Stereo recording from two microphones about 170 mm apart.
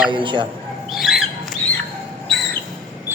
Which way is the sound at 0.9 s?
Centre (ahead or behind).